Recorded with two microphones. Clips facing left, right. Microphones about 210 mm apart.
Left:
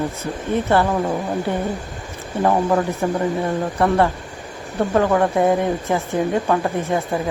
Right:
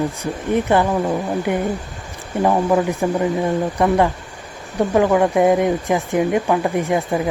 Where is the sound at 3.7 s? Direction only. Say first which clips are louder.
Left 1 dB; 15° right (ahead or behind).